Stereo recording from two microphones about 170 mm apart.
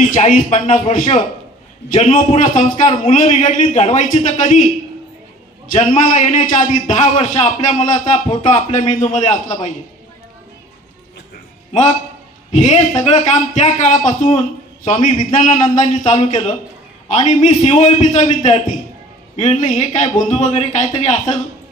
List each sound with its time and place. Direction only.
0.1 s a man's voice: 45° left (ahead or behind)
5.7 s a man's voice: 50° left (ahead or behind)
12.4 s a man's voice: 40° left (ahead or behind)